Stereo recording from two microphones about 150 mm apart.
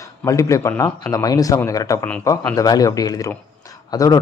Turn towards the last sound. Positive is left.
turn(degrees=25)  # may be behind; listen again after turning